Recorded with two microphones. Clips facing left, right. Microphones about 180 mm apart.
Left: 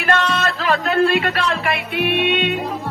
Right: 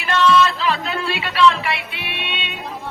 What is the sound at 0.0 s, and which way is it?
Music, 55° left (ahead or behind).